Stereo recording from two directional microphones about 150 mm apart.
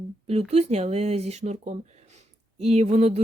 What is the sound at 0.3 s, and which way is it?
Speech, 45° right (ahead or behind).